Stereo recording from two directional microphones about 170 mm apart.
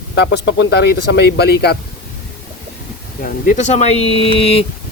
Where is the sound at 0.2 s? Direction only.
90° left.